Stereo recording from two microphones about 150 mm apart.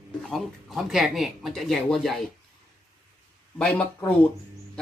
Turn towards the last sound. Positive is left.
turn(degrees=10)  # may be behind; listen again after turning